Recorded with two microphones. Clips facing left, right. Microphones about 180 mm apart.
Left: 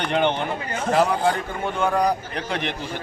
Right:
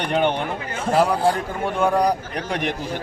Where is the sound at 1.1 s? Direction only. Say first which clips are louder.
Right 2 dB; 30° right (ahead or behind).